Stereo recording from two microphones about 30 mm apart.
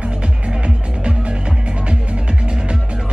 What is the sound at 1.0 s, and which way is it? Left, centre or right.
Music, right.